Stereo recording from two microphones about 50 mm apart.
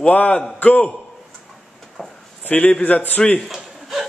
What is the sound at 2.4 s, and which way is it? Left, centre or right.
Speech, left.